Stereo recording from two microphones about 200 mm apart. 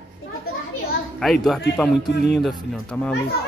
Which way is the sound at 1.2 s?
Centre (ahead or behind).